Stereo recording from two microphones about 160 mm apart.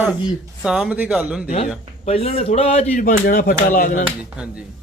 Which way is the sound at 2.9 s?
60° left (ahead or behind).